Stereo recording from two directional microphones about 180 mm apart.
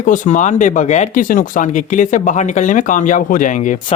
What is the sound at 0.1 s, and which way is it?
Speech, 45° left (ahead or behind).